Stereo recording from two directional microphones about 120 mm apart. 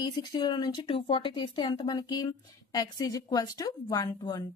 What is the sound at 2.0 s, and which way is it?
A woman's voice, 35° left (ahead or behind).